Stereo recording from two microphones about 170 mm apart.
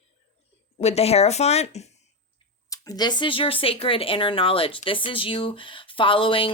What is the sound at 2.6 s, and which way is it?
Speech, 20° left (ahead or behind).